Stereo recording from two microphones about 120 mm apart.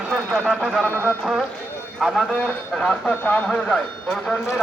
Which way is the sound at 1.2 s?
5° right (ahead or behind).